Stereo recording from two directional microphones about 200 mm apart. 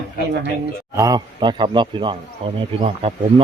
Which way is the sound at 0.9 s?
15° right (ahead or behind).